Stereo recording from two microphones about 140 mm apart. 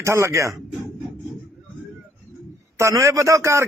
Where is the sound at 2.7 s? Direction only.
20° right (ahead or behind).